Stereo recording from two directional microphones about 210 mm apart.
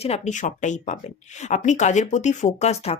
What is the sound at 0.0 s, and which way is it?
A woman's voice, 35° left (ahead or behind).